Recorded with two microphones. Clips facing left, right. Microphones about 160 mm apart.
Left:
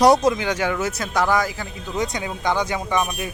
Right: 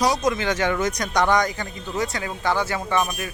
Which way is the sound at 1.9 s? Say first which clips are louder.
Left 1 dB; 20° left (ahead or behind).